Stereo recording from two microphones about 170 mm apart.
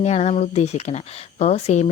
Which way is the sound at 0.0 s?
40° left (ahead or behind).